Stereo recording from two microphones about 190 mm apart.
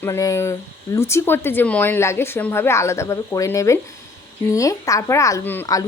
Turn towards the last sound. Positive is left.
turn(degrees=15)  # may be behind; listen again after turning